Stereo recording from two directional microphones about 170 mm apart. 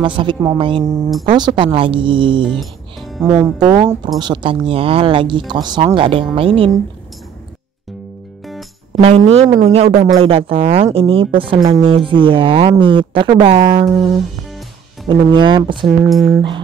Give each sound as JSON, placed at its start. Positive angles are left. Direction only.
{"t": 0.0, "sound": "a woman's voice", "side_deg": -30}
{"t": 2.4, "sound": "music", "side_deg": 0}
{"t": 3.3, "sound": "a woman's voice", "side_deg": -25}
{"t": 9.0, "sound": "speech", "side_deg": -40}
{"t": 13.8, "sound": "speech", "side_deg": 0}
{"t": 15.0, "sound": "a woman's voice", "side_deg": -30}
{"t": 16.1, "sound": "speech", "side_deg": 0}